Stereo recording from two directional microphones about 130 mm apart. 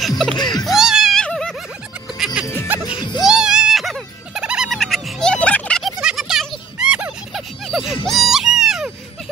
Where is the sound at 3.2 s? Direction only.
5° right (ahead or behind).